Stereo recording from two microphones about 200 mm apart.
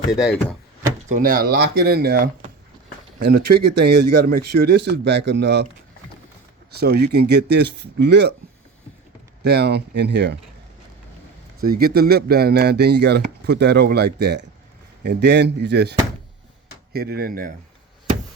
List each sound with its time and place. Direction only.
0.1 s speech: centre (ahead or behind)
1.0 s speech: 40° right (ahead or behind); by 5.6 s 60° right (ahead or behind)
6.7 s speech: 55° right (ahead or behind)
9.4 s speech: 55° right (ahead or behind)
11.6 s speech: 50° right (ahead or behind)